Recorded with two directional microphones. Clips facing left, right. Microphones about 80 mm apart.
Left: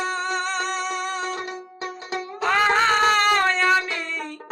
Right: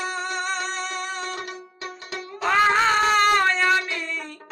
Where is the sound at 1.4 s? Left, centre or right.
Left.